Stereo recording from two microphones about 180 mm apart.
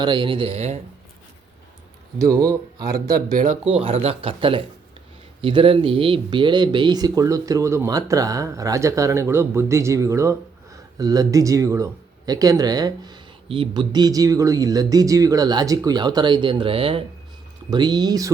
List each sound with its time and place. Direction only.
0.0 s speech: 25° right (ahead or behind)
2.1 s speech: 15° right (ahead or behind)
3.2 s speech: 50° right (ahead or behind)
3.6 s speech: 30° right (ahead or behind)